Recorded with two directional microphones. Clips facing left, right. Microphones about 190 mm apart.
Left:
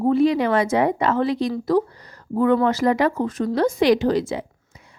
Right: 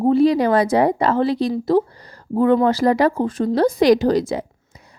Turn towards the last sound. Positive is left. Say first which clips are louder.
# right 3 dB
turn(degrees=-40)  # may be behind; listen again after turning